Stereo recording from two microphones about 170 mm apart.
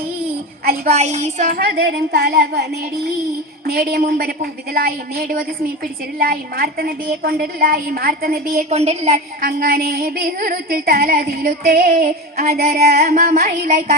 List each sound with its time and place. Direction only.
0.9 s a sound: 40° right (ahead or behind)
1.5 s speech: 80° right
3.7 s a woman's voice: 60° right (ahead or behind)
8.7 s a woman's voice: 40° right (ahead or behind)
9.4 s a woman's voice: 60° right (ahead or behind)